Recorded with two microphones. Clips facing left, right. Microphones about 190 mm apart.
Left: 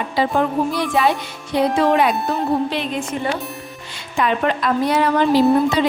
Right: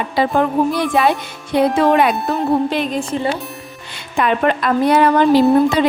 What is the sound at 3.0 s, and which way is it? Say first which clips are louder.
Speech: right 3 dB; 30° right (ahead or behind).